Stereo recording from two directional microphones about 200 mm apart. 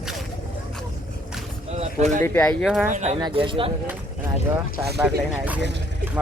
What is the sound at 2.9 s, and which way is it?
Speech, 35° right (ahead or behind).